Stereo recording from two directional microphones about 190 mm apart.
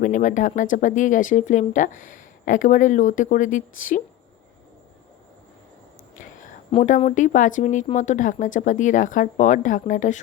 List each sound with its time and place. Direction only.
0.0 s speech: 40° left (ahead or behind)
6.8 s speech: 40° left (ahead or behind)